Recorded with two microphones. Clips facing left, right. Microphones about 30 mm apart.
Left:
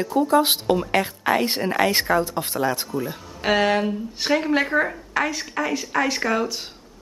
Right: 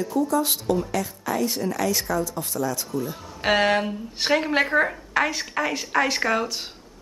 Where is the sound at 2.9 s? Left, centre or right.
Left.